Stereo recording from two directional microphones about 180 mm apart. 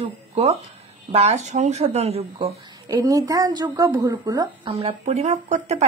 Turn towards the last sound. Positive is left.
turn(degrees=-40)  # may be behind; listen again after turning